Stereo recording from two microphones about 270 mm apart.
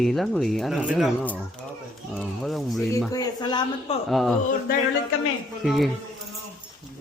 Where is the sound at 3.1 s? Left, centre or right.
Centre.